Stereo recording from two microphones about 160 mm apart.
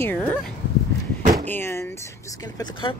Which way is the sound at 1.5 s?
15° left (ahead or behind).